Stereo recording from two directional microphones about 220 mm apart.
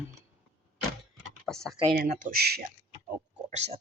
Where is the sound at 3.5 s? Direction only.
30° right (ahead or behind).